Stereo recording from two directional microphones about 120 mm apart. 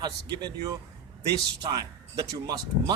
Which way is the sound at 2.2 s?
30° right (ahead or behind).